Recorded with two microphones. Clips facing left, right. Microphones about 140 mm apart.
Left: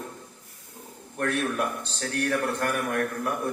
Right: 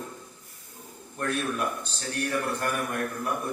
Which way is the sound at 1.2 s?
80° left.